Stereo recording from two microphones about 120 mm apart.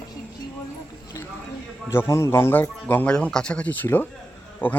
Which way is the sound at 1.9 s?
20° left (ahead or behind).